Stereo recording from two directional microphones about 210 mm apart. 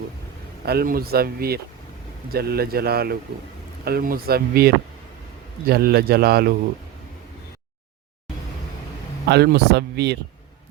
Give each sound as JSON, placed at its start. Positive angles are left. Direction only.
{"t": 0.6, "sound": "speech", "side_deg": -50}
{"t": 9.3, "sound": "speech", "side_deg": -50}